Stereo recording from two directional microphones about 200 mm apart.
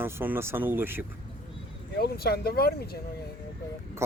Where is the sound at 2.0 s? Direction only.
50° left (ahead or behind).